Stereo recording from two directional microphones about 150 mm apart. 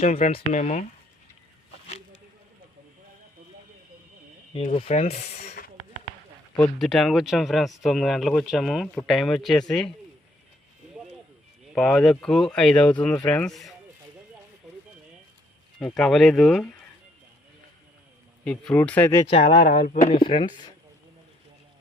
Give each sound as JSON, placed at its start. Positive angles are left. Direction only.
{"t": 0.0, "sound": "rub", "side_deg": 45}
{"t": 4.6, "sound": "rub", "side_deg": 45}
{"t": 6.6, "sound": "speech", "side_deg": 5}
{"t": 11.7, "sound": "speech", "side_deg": 5}
{"t": 16.0, "sound": "speech", "side_deg": 0}
{"t": 18.4, "sound": "speech", "side_deg": 5}
{"t": 19.3, "sound": "rub", "side_deg": 40}
{"t": 19.5, "sound": "speech", "side_deg": 75}
{"t": 20.1, "sound": "speech", "side_deg": 35}